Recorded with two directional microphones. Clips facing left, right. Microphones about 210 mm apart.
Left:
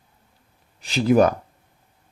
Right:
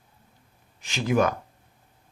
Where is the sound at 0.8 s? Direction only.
35° left (ahead or behind).